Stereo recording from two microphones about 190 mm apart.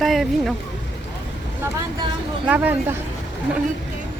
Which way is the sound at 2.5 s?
10° right (ahead or behind).